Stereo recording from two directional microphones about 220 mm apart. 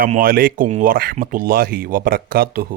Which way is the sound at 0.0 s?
40° right (ahead or behind).